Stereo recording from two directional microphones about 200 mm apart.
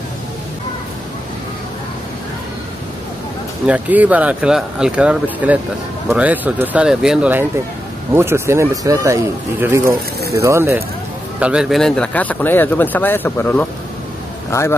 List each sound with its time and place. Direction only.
3.6 s speech: 10° right (ahead or behind); by 14.8 s 15° left (ahead or behind)